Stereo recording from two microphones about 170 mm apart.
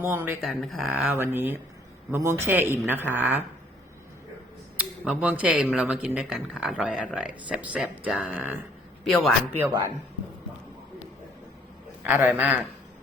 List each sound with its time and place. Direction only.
0.0 s speech: 10° right (ahead or behind)
0.4 s speech: centre (ahead or behind)
5.0 s speech: 5° right (ahead or behind)
9.6 s speech: 20° right (ahead or behind)
12.0 s speech: 10° right (ahead or behind)